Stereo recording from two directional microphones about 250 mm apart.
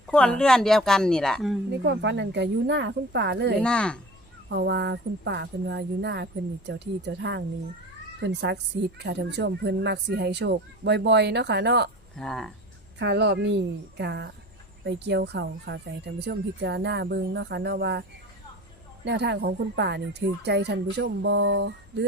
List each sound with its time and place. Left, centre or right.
0.1 s a woman's voice: centre
1.8 s speech: right
3.6 s a woman's voice: centre
4.4 s speech: right
12.1 s a woman's voice: centre
13.0 s speech: right
19.0 s speech: right